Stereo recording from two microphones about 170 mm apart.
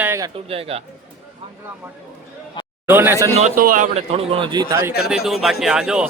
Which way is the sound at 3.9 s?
35° right (ahead or behind).